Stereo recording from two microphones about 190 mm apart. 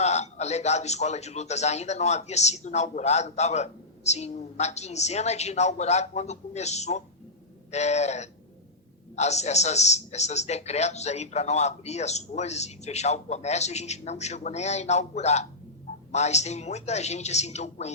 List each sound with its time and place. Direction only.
0.0 s a man's voice: 35° left (ahead or behind)